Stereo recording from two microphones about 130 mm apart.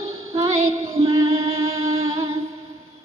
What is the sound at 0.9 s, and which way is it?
Music, 45° right (ahead or behind).